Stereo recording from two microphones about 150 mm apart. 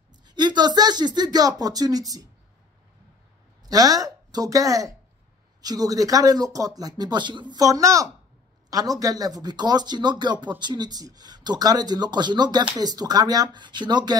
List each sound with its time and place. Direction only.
0.3 s speech: 30° right (ahead or behind)
3.6 s speech: 25° right (ahead or behind)